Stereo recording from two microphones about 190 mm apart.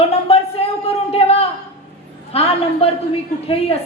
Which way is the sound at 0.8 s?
30° left (ahead or behind).